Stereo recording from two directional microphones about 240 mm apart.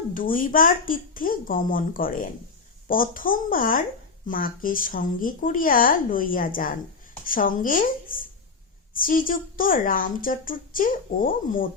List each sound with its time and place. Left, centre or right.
0.1 s speech: left